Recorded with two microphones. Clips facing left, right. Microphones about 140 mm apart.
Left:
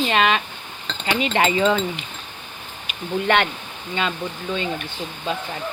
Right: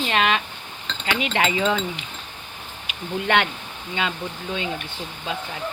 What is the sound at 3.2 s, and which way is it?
Speech, 5° right (ahead or behind).